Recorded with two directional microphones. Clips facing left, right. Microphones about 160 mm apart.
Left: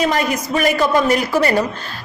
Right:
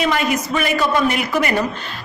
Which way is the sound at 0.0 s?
40° left (ahead or behind).